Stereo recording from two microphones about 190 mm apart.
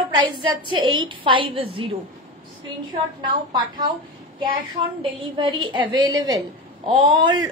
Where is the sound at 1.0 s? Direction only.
25° right (ahead or behind).